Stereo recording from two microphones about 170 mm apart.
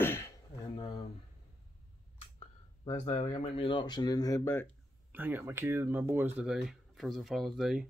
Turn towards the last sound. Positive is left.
turn(degrees=0)  # may be behind; listen again after turning